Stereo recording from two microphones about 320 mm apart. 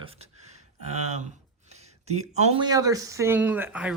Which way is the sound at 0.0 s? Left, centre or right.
Centre.